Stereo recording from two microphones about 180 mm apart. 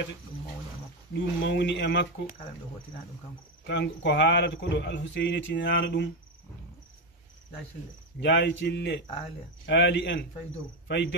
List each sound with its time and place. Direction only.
1.4 s speech: 80° left
3.6 s speech: 75° left (ahead or behind)
8.2 s speech: 80° left